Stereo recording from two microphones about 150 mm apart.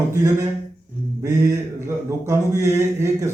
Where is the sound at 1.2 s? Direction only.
20° right (ahead or behind).